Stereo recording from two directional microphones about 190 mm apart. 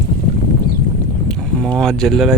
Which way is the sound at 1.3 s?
5° left (ahead or behind).